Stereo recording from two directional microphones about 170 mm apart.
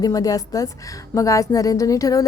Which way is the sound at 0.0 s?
20° left (ahead or behind).